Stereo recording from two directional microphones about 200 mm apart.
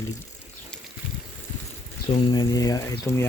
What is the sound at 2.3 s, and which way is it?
Speech, 20° left (ahead or behind).